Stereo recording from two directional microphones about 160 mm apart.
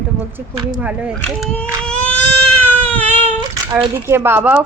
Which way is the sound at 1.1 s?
5° left (ahead or behind).